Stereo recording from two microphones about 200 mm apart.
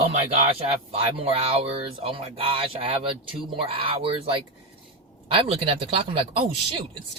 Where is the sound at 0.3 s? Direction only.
30° right (ahead or behind).